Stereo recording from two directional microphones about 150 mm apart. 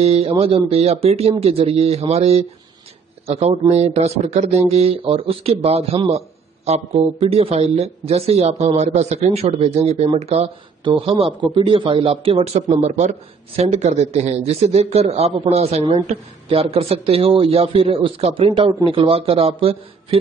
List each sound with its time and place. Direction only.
0.0 s a man's voice: 45° right (ahead or behind)